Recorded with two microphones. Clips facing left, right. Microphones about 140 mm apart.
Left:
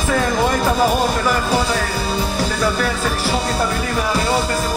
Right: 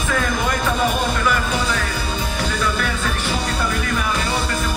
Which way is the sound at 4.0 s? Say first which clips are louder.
Left 4 dB; 30° left (ahead or behind).